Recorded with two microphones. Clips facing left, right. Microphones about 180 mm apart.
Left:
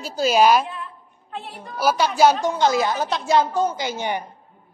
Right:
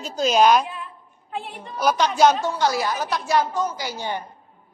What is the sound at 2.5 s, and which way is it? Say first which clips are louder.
A woman's voice: left 3 dB; 20° left (ahead or behind).